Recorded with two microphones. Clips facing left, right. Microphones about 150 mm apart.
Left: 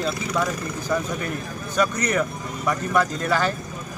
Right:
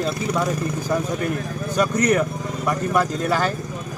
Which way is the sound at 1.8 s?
45° right (ahead or behind).